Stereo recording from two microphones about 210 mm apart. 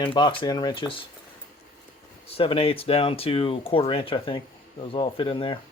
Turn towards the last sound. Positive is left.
turn(degrees=25)  # may be behind; listen again after turning